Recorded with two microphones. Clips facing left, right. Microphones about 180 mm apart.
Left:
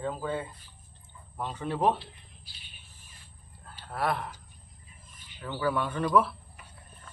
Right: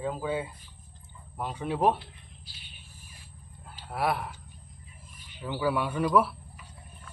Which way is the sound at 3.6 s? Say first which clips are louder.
Right 1 dB; 10° right (ahead or behind).